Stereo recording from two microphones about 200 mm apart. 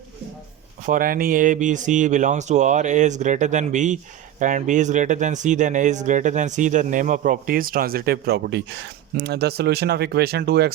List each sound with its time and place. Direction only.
0.9 s speech: 45° right (ahead or behind)